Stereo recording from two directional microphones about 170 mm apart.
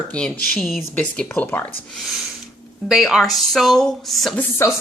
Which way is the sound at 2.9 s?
Centre (ahead or behind).